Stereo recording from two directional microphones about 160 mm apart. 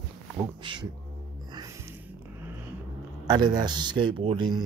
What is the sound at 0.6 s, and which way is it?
Speech, 30° right (ahead or behind).